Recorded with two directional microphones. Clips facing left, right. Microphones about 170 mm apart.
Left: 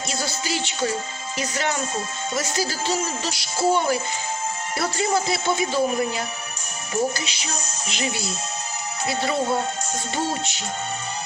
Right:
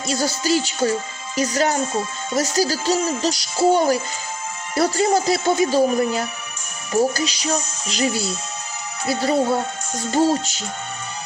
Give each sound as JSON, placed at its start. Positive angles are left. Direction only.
{"t": 0.1, "sound": "speech", "side_deg": -40}